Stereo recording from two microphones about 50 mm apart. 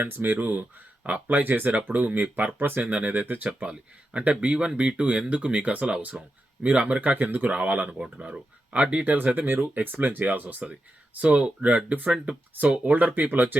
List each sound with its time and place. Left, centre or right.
0.0 s speech: right
2.6 s speech: right
2.8 s speech: right
3.1 s speech: right
7.9 s speech: centre
8.3 s speech: right